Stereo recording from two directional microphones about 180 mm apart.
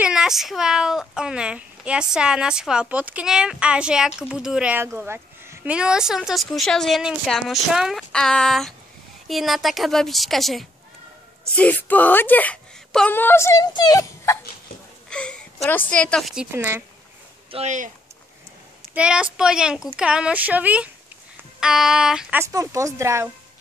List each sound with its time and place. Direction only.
0.0 s speech: 5° right (ahead or behind); by 14.4 s 15° left (ahead or behind)
15.0 s a sound: 5° left (ahead or behind)
15.9 s speech: 5° left (ahead or behind)
16.5 s speech: 15° right (ahead or behind)
17.5 s speech: 40° right (ahead or behind)
18.9 s speech: 5° right (ahead or behind)
22.4 s speech: 15° right (ahead or behind)